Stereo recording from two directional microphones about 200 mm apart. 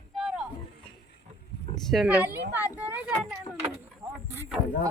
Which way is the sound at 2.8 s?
5° right (ahead or behind).